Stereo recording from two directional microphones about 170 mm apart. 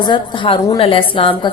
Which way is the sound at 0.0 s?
25° left (ahead or behind).